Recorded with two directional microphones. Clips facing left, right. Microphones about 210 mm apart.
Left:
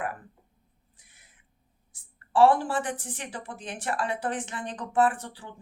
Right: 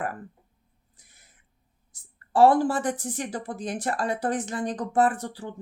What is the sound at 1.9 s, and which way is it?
A woman's voice, 40° right (ahead or behind).